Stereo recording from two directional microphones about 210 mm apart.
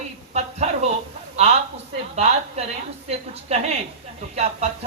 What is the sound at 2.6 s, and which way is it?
A man's voice, 30° right (ahead or behind).